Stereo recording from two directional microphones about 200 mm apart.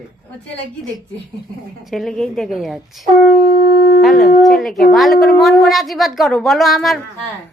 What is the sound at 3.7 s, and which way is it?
Shofar, 45° left (ahead or behind).